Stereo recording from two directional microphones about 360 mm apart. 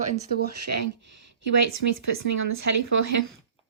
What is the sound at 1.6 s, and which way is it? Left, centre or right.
Speech, right.